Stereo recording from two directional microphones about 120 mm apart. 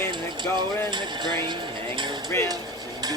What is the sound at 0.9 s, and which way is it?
Speech, 40° right (ahead or behind).